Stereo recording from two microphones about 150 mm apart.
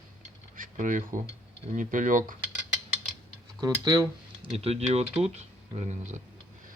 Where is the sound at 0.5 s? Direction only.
60° right (ahead or behind).